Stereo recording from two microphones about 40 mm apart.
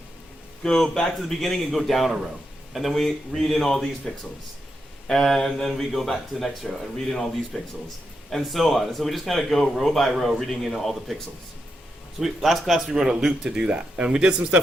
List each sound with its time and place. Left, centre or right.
0.6 s a man's voice: centre
12.2 s a man's voice: centre
12.9 s speech: centre